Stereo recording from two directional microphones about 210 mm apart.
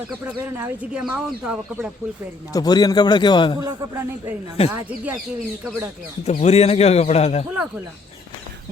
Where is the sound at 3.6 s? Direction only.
15° right (ahead or behind).